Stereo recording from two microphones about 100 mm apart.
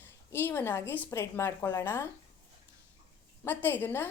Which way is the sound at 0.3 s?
20° left (ahead or behind).